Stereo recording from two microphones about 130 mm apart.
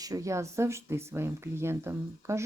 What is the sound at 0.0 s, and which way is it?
Speech, 25° right (ahead or behind).